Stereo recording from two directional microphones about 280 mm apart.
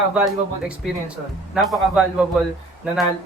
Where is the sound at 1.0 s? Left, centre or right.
Centre.